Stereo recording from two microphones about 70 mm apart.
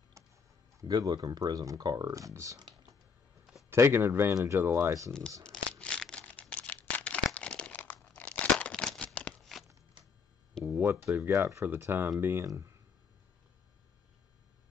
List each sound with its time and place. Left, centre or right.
0.2 s clicking: right
0.8 s speech: right
1.4 s speech: right
1.8 s speech: right
3.7 s speech: right
5.4 s a sound: centre
6.4 s crumpling: centre
9.4 s a sound: centre
10.6 s a sound: right
11.3 s speech: right
11.6 s speech: right